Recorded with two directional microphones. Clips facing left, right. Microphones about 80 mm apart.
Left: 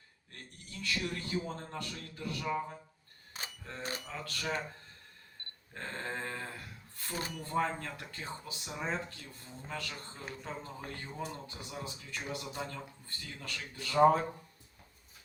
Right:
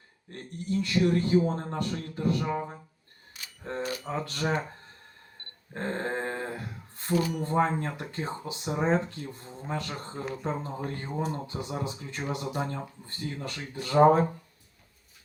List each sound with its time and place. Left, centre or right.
0.3 s speech: right
3.6 s speech: right
5.7 s a sound: right
7.3 s speech: right